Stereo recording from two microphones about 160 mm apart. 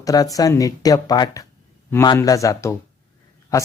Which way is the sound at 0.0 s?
20° left (ahead or behind).